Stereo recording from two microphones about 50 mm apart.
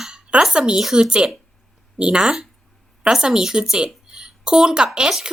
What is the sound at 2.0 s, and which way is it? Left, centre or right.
A woman's voice, centre.